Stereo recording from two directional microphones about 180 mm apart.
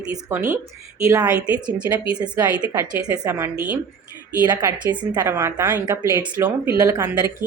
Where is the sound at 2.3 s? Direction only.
20° right (ahead or behind).